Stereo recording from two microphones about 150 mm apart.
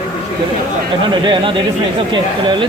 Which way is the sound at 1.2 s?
30° right (ahead or behind).